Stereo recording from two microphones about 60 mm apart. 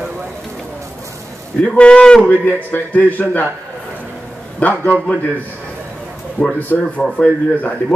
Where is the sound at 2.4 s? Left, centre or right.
Left.